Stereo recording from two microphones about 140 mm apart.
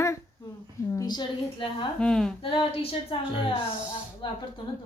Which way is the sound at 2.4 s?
40° left (ahead or behind).